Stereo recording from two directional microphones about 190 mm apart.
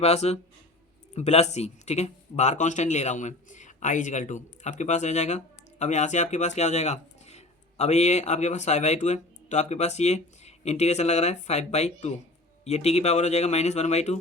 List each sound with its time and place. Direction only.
0.0 s speech: 35° left (ahead or behind)